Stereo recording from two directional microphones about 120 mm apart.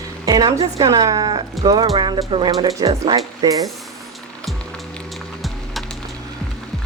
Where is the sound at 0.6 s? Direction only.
35° right (ahead or behind).